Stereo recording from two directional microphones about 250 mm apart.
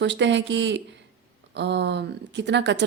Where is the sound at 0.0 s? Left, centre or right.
Right.